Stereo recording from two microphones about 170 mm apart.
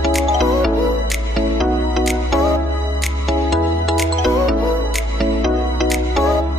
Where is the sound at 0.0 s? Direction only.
Centre (ahead or behind).